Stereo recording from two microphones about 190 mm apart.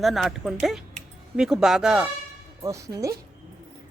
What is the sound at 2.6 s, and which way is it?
Speech, 15° right (ahead or behind).